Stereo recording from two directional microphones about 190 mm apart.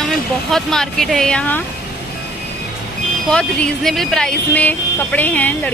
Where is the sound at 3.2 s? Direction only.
5° left (ahead or behind).